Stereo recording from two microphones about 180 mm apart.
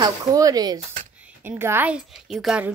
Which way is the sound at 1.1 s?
10° right (ahead or behind).